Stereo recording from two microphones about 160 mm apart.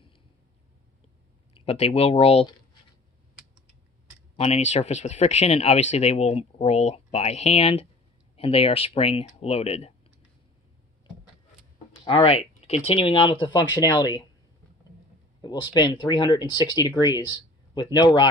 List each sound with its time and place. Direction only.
1.5 s speech: 40° left (ahead or behind)
4.4 s speech: 40° left (ahead or behind)
12.0 s speech: 30° left (ahead or behind)
15.4 s speech: 25° left (ahead or behind)